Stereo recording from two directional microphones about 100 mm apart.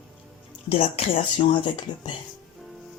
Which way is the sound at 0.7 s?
90° left.